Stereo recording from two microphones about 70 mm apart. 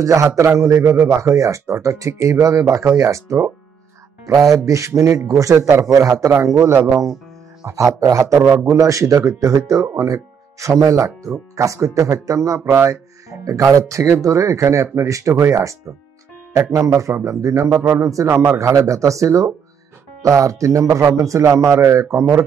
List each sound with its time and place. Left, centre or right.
0.0 s speech: right
4.3 s speech: right
7.6 s speech: right
16.7 s speech: right